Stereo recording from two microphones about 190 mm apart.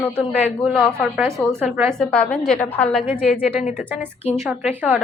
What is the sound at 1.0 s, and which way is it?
Speech, 10° right (ahead or behind).